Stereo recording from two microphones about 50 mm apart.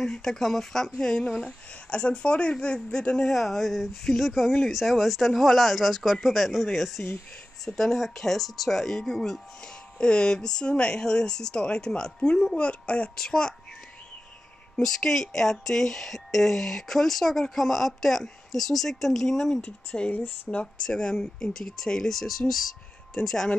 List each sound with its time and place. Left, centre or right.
0.0 s speech: centre
3.3 s speech: centre; by 13.2 s left
13.2 s speech: centre
14.8 s speech: centre